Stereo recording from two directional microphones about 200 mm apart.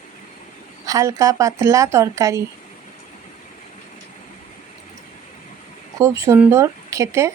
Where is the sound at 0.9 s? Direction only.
15° right (ahead or behind).